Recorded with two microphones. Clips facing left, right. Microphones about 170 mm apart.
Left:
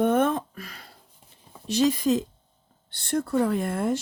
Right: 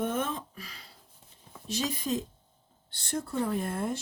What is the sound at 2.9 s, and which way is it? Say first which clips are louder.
Speech: left 8 dB; 65° left (ahead or behind).